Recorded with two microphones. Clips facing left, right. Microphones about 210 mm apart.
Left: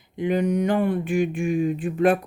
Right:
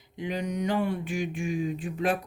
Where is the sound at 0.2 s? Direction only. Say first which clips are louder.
Left 9 dB; 55° left (ahead or behind).